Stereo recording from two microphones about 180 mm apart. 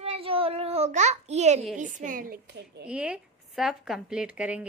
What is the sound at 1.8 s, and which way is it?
A woman's voice, 45° right (ahead or behind).